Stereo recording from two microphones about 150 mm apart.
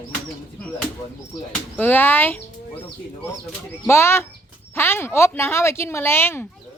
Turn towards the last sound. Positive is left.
turn(degrees=15)  # may be behind; listen again after turning